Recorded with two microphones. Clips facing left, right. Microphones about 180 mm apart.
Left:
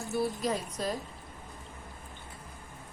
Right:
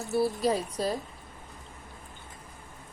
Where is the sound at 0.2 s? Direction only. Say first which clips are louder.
Right 5 dB; 35° right (ahead or behind).